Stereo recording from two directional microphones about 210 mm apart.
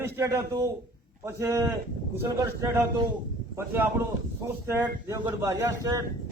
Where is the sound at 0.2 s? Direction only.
15° right (ahead or behind).